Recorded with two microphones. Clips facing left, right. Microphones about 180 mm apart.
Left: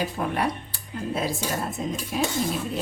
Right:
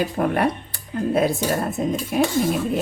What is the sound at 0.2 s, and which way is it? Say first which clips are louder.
Speech: right 6 dB; 55° right (ahead or behind).